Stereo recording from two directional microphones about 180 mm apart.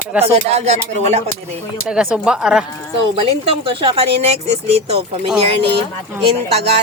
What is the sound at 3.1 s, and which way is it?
Speech, 30° right (ahead or behind).